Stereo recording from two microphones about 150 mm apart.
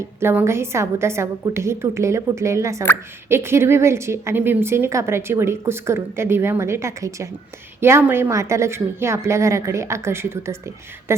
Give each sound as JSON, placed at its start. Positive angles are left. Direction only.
{"t": 0.2, "sound": "a woman's voice", "side_deg": -15}